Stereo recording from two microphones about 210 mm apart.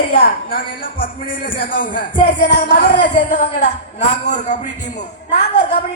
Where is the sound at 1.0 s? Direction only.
40° left (ahead or behind).